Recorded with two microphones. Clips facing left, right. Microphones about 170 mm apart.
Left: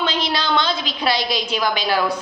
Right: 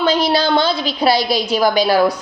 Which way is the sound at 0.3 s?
35° right (ahead or behind).